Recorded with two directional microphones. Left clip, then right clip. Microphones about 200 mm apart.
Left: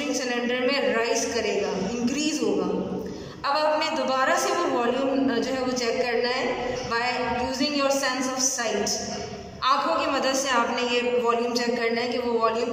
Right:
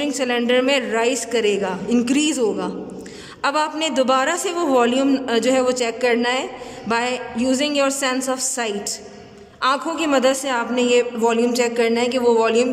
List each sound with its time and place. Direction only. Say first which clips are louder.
0.2 s a man's voice: right 9 dB; 45° right (ahead or behind)
9.6 s a man's voice: right 2 dB; 45° right (ahead or behind)